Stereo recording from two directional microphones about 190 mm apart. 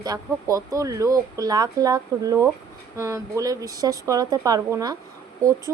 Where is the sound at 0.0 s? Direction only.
20° right (ahead or behind).